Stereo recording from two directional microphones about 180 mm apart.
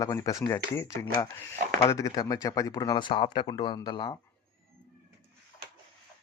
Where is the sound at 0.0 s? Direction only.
20° left (ahead or behind).